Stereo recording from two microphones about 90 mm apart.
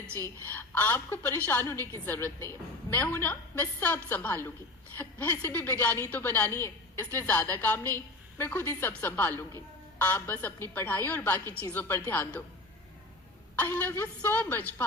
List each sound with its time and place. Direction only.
0.2 s a woman's voice: 20° left (ahead or behind)
13.6 s a woman's voice: 20° left (ahead or behind)